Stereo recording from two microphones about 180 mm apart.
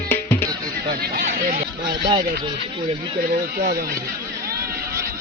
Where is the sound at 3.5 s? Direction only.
55° right (ahead or behind).